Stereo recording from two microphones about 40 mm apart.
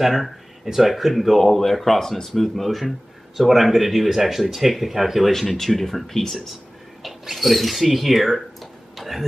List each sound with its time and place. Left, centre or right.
0.0 s speech: centre
5.3 s speech: centre